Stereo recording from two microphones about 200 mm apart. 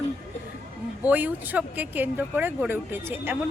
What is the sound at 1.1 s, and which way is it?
Speech, 10° right (ahead or behind).